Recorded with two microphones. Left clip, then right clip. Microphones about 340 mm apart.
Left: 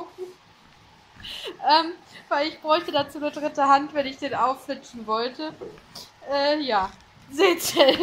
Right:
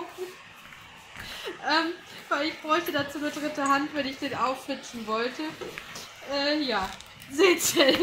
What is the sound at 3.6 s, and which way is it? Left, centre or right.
A woman's voice, centre.